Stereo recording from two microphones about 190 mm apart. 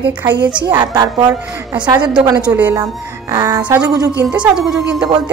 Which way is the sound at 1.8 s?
25° right (ahead or behind).